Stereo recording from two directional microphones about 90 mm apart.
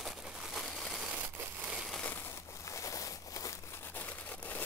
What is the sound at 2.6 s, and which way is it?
Crumpling, 35° left (ahead or behind).